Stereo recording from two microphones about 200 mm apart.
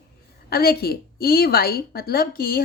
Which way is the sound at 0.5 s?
50° left (ahead or behind).